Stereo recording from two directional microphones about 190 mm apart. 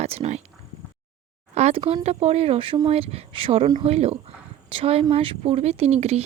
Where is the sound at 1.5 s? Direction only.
35° right (ahead or behind).